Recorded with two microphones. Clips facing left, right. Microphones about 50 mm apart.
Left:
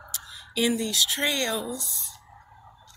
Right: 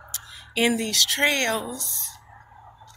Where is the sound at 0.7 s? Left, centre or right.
Right.